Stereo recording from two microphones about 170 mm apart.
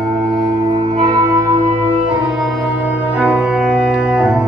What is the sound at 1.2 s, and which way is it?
Music, 20° right (ahead or behind).